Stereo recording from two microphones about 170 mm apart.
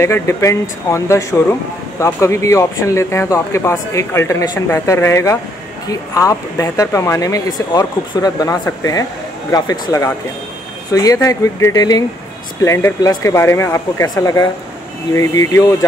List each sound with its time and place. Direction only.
0.0 s speech: 15° left (ahead or behind)